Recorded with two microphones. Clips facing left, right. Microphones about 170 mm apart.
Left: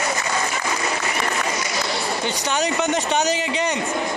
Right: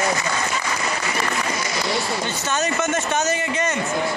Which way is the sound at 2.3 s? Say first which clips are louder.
Left 1 dB; 15° left (ahead or behind).